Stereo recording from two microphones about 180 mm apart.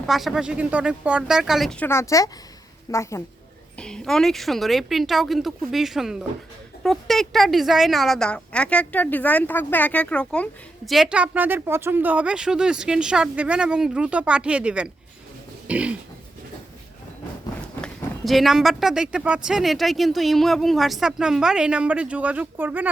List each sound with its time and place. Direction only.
0.0 s a woman's voice: centre (ahead or behind); by 3.2 s 15° left (ahead or behind)
3.8 s a woman's voice: 5° left (ahead or behind)
15.6 s throat clearing: 5° right (ahead or behind)
17.7 s a woman's voice: 5° left (ahead or behind)